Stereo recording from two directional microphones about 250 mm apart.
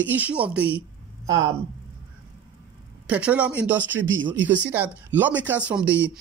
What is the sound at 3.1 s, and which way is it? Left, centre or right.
Speech, centre.